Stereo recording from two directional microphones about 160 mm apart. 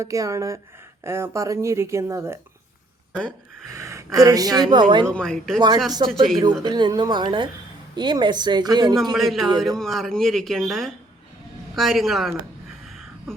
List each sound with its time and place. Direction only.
0.0 s speech: 20° right (ahead or behind)
3.1 s speech: 5° left (ahead or behind)
3.7 s speech: 20° right (ahead or behind)
5.1 s speech: 5° left (ahead or behind)
5.5 s speech: 25° right (ahead or behind)
9.1 s speech: centre (ahead or behind)